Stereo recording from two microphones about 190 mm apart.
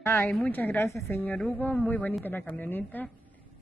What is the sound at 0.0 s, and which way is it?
Speech, 15° left (ahead or behind).